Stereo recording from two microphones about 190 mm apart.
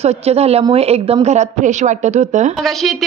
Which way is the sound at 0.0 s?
35° right (ahead or behind).